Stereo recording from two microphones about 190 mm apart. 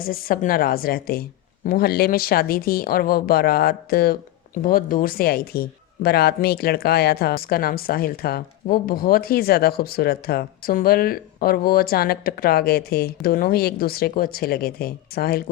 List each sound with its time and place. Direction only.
0.0 s speech: 50° left (ahead or behind)